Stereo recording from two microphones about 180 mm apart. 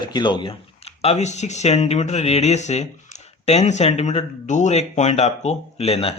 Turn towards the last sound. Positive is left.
turn(degrees=35)  # may be behind; listen again after turning